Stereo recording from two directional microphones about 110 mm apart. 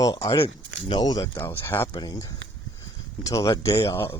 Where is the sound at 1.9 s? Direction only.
35° left (ahead or behind).